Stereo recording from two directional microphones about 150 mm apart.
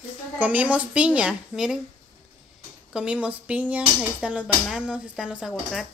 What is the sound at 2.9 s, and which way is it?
Speech, 5° right (ahead or behind).